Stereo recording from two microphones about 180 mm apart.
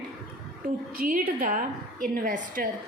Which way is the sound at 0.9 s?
50° right (ahead or behind).